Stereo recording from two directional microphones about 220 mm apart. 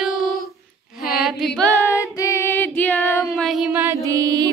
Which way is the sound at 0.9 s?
45° left (ahead or behind).